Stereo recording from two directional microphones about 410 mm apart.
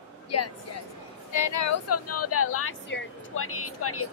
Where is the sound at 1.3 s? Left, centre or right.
Left.